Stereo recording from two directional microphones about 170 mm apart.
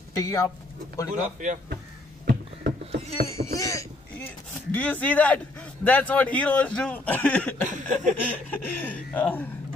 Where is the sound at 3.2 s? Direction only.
20° left (ahead or behind).